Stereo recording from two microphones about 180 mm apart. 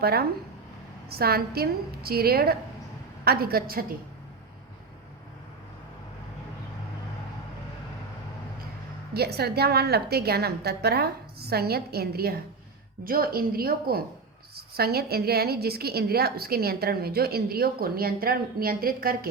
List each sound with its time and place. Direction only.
0.0 s a woman's voice: 60° right (ahead or behind)
9.1 s a woman's voice: 60° right (ahead or behind)